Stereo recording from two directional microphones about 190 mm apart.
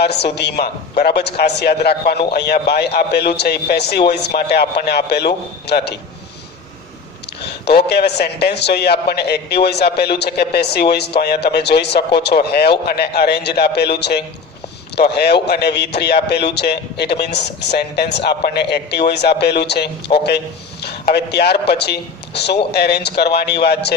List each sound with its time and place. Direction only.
0.0 s a man's voice: 60° left (ahead or behind)
7.6 s a man's voice: 60° left (ahead or behind)